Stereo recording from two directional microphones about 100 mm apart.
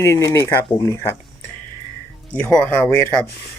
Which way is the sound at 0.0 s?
30° left (ahead or behind).